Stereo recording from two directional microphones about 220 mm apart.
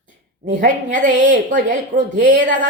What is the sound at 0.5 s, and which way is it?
A woman's voice, 35° right (ahead or behind).